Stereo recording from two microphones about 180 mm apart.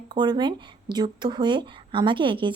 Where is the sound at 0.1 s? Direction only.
25° right (ahead or behind).